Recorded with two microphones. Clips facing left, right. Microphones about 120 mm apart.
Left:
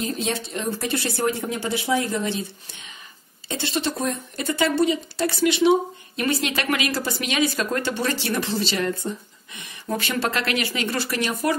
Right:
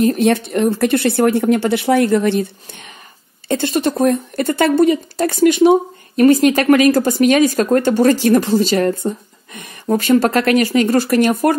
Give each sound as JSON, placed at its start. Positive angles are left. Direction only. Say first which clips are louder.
{"t": 0.0, "sound": "speech", "louder": "right 13 dB", "side_deg": -60}
{"t": 3.4, "sound": "a woman's voice", "louder": "right 9 dB", "side_deg": -50}